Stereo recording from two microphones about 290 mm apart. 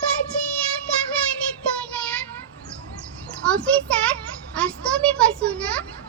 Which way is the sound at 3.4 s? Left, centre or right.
Centre.